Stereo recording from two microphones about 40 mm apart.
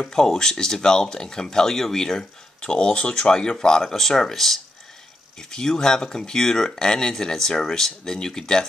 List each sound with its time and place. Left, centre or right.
0.0 s speech: centre
2.6 s speech: left